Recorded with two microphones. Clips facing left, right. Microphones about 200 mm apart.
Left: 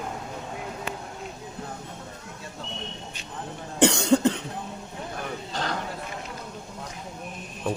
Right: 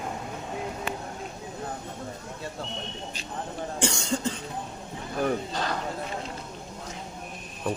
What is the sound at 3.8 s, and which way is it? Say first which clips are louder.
Cough: left 10 dB; 65° left (ahead or behind).